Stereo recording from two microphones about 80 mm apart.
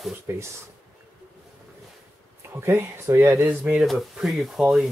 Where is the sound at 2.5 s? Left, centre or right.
Right.